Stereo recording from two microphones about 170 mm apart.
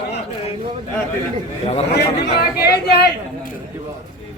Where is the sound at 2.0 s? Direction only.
75° left (ahead or behind).